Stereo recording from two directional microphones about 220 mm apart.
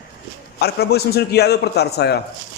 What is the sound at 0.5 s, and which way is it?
A man's voice, 45° left (ahead or behind).